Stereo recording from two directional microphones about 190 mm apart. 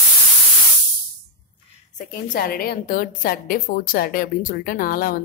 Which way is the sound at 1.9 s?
50° left (ahead or behind).